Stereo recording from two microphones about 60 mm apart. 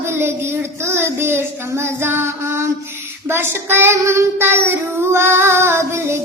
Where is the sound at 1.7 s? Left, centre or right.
Right.